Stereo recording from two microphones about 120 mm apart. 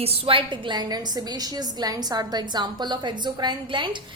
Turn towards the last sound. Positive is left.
turn(degrees=-40)  # may be behind; listen again after turning